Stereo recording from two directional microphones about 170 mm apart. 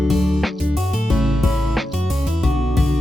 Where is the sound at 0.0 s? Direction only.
Centre (ahead or behind).